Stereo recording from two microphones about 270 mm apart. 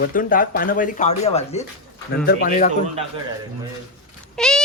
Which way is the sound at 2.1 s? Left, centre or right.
Left.